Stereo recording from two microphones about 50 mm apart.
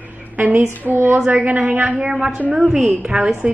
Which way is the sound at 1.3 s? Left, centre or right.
Right.